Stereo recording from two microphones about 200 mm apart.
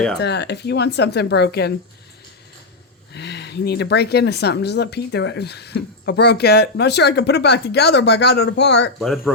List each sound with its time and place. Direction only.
0.2 s speech: 55° left (ahead or behind)
3.1 s speech: 60° left (ahead or behind)
9.0 s speech: centre (ahead or behind)